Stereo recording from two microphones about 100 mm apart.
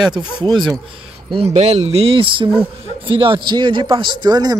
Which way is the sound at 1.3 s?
90° right.